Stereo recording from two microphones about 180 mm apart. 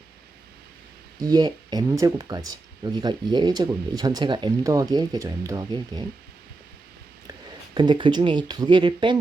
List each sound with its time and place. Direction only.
1.2 s speech: 20° right (ahead or behind)
7.3 s speech: 25° right (ahead or behind)